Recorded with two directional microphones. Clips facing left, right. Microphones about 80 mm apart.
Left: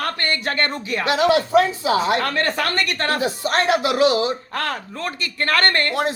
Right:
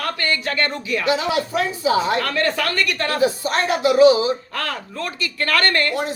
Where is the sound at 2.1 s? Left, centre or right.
Left.